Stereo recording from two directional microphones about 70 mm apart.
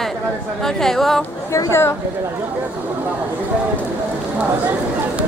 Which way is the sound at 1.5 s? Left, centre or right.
Left.